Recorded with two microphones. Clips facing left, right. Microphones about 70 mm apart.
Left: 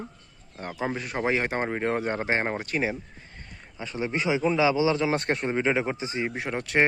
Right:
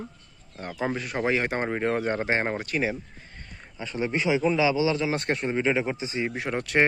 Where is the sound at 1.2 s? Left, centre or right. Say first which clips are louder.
Even; centre.